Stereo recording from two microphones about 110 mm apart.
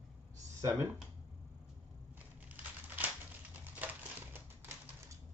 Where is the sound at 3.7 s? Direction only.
15° right (ahead or behind).